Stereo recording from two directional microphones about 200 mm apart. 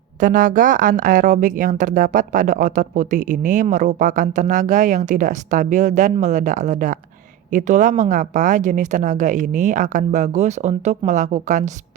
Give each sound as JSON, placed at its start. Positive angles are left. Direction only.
{"t": 0.2, "sound": "speech", "side_deg": -40}